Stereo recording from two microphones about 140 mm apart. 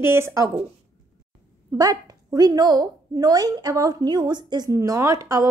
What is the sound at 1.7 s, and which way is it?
A woman's voice, 25° right (ahead or behind).